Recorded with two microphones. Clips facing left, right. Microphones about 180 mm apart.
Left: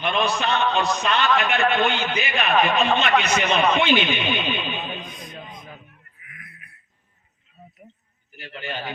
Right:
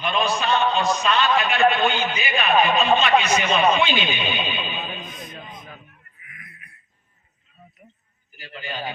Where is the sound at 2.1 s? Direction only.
55° left (ahead or behind).